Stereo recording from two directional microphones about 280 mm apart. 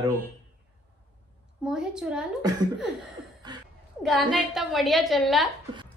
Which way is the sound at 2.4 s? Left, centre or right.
Centre.